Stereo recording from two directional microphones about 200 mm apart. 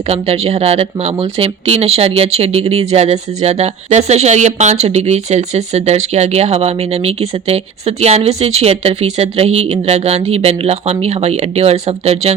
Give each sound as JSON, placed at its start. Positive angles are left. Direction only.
{"t": 0.1, "sound": "speech", "side_deg": -30}